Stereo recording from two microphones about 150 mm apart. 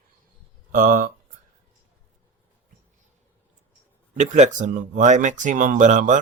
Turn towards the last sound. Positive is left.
turn(degrees=-55)  # may be behind; listen again after turning